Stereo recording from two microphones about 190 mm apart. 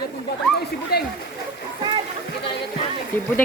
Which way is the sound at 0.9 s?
55° left (ahead or behind).